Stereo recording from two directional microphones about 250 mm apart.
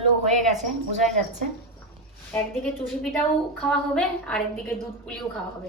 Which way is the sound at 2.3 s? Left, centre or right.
Centre.